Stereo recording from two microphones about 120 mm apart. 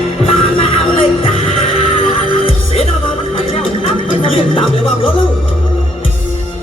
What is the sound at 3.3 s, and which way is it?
Music, 50° left (ahead or behind).